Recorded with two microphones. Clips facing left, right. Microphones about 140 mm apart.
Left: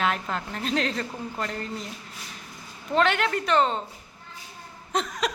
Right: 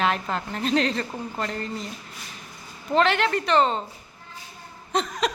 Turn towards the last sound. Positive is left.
turn(degrees=0)  # may be behind; listen again after turning